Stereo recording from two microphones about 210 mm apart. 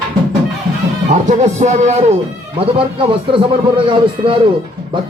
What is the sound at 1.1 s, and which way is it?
A man's voice, 35° right (ahead or behind).